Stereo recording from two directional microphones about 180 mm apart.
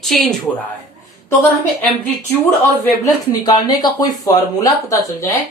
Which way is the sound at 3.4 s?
25° left (ahead or behind).